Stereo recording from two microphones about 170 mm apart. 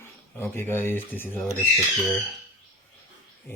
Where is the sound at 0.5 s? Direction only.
10° left (ahead or behind).